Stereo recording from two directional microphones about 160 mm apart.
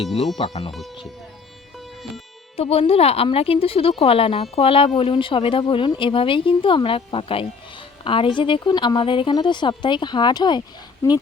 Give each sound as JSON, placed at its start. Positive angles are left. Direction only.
{"t": 0.3, "sound": "speech", "side_deg": 30}
{"t": 2.6, "sound": "a woman's voice", "side_deg": 40}